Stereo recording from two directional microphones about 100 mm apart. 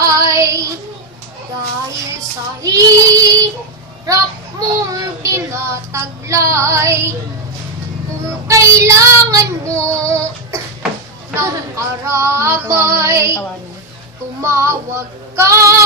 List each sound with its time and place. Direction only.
0.0 s child singing: 30° right (ahead or behind)
2.6 s child singing: 35° right (ahead or behind)
4.6 s child singing: 35° right (ahead or behind)
8.2 s child singing: 30° right (ahead or behind)
11.3 s female singing: 30° right (ahead or behind)
14.4 s female singing: 30° right (ahead or behind)